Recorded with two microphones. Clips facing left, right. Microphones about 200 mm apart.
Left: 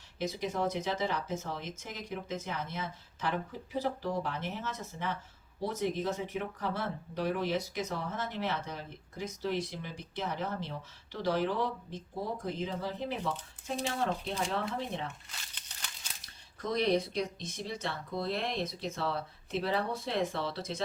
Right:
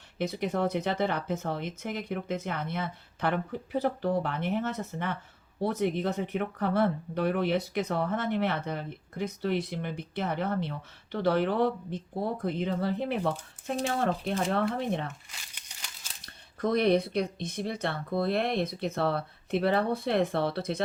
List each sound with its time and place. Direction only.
0.2 s speech: 60° right (ahead or behind)
16.2 s speech: 60° right (ahead or behind)